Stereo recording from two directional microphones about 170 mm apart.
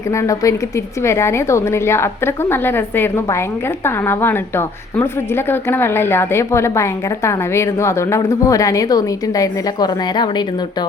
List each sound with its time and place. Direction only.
0.1 s a woman's voice: 20° left (ahead or behind)